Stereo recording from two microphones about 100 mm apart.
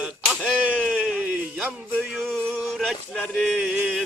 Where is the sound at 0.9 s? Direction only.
5° right (ahead or behind).